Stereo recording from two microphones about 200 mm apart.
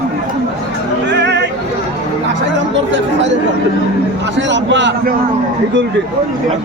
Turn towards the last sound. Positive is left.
turn(degrees=-65)  # may be behind; listen again after turning